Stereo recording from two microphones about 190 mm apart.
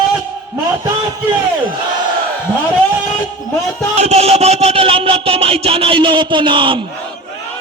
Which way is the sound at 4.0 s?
35° right (ahead or behind).